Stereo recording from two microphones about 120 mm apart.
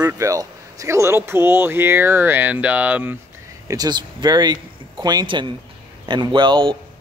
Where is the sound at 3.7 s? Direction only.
35° right (ahead or behind).